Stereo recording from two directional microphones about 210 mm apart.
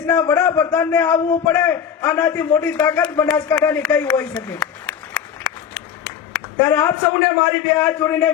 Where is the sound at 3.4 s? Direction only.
10° left (ahead or behind).